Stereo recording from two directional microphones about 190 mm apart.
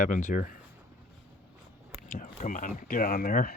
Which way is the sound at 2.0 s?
45° left (ahead or behind).